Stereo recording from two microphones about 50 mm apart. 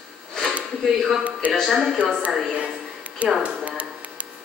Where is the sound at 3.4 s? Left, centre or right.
Right.